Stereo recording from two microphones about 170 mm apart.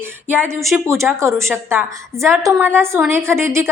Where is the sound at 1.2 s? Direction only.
15° right (ahead or behind).